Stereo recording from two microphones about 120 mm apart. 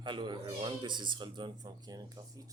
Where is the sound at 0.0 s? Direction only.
40° right (ahead or behind).